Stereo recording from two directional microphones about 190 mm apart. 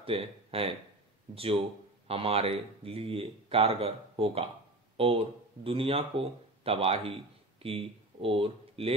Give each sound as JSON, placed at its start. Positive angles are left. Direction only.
{"t": 0.0, "sound": "speech", "side_deg": -30}